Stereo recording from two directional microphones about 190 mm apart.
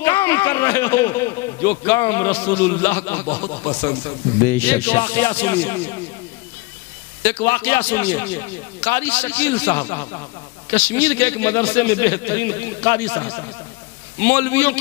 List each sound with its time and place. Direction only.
0.0 s a man's voice: 15° left (ahead or behind)
3.6 s speech: 25° left (ahead or behind)
4.5 s a man's voice: 10° left (ahead or behind)
7.2 s a man's voice: 15° left (ahead or behind)